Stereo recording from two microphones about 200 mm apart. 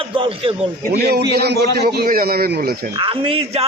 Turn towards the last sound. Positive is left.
turn(degrees=-30)  # may be behind; listen again after turning